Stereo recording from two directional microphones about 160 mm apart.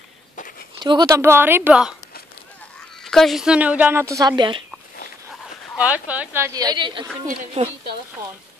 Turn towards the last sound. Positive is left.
turn(degrees=-40)  # may be behind; listen again after turning